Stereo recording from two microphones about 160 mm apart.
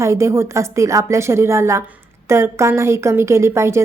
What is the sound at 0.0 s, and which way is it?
A woman's voice, 20° right (ahead or behind).